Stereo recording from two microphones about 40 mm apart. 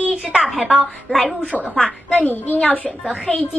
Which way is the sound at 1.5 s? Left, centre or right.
Left.